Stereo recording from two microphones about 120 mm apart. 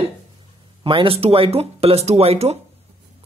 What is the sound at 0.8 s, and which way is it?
Speech, 45° right (ahead or behind).